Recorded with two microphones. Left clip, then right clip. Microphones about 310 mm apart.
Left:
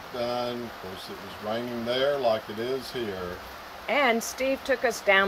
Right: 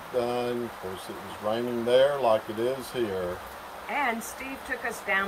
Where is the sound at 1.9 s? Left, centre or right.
Centre.